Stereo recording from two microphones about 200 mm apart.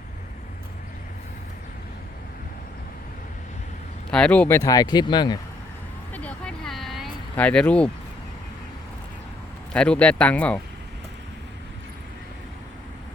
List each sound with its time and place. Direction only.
4.1 s speech: 5° left (ahead or behind); by 5.4 s 20° left (ahead or behind)
6.1 s a sound: 5° left (ahead or behind)
9.7 s speech: 5° left (ahead or behind)